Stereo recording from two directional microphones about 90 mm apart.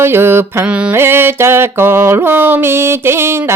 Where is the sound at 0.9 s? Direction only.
25° right (ahead or behind).